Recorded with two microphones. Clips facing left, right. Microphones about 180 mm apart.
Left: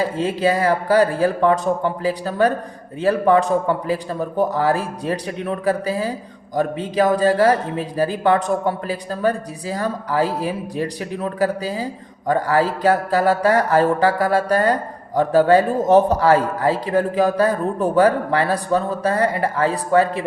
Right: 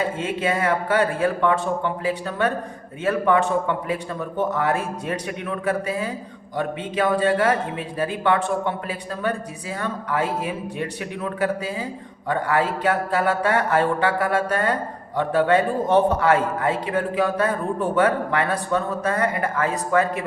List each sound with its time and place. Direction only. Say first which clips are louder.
0.0 s mantra: left 5 dB; 35° left (ahead or behind)